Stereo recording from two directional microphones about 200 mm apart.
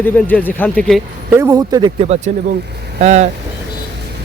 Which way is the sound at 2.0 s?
35° right (ahead or behind).